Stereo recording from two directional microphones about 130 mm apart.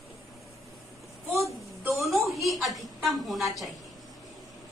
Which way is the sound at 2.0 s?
Centre (ahead or behind).